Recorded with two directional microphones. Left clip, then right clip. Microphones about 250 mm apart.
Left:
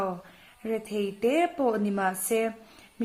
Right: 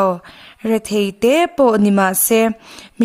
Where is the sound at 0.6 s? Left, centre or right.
Right.